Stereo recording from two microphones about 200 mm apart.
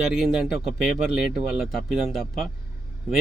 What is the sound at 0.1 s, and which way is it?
Speech, centre (ahead or behind).